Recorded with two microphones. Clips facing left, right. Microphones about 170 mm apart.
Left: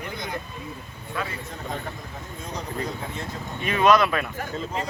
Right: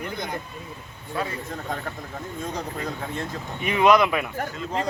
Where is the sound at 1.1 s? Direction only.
30° right (ahead or behind).